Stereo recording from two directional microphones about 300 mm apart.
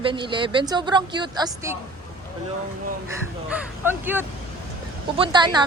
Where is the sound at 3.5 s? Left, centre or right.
Centre.